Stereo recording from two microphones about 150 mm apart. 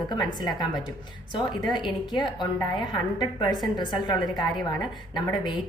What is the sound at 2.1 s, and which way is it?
Speech, 30° left (ahead or behind).